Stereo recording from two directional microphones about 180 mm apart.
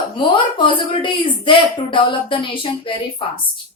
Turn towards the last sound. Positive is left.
turn(degrees=30)  # may be behind; listen again after turning